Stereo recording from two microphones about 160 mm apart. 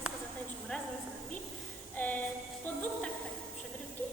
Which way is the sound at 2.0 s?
10° left (ahead or behind).